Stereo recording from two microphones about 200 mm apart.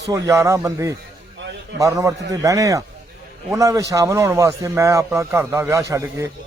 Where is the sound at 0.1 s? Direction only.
15° right (ahead or behind).